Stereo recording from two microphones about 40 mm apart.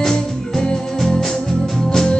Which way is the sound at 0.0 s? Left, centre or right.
Centre.